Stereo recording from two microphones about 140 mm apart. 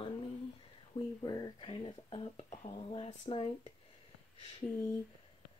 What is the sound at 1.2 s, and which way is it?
Speech, 30° left (ahead or behind).